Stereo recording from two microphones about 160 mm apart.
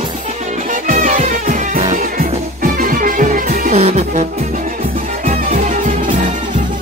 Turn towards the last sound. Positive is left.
turn(degrees=-55)  # may be behind; listen again after turning